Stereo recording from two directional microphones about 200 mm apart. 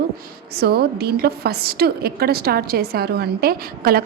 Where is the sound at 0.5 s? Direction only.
50° right (ahead or behind).